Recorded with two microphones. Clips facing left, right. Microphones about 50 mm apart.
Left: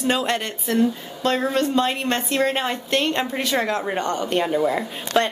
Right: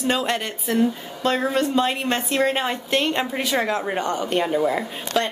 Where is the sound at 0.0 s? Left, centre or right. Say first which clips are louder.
Left 1 dB; centre.